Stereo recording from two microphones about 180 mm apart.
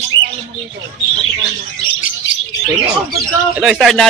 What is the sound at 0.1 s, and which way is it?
Bird, 20° right (ahead or behind).